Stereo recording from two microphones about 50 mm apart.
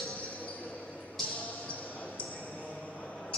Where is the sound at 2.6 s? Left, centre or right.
Left.